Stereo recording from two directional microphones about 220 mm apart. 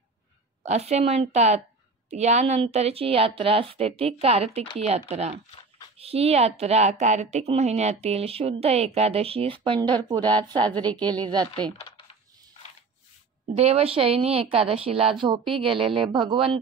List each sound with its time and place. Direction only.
0.7 s a woman's voice: 30° right (ahead or behind)
10.7 s a woman's voice: 5° left (ahead or behind)
11.2 s a woman's voice: 20° right (ahead or behind)
13.6 s a woman's voice: 25° right (ahead or behind)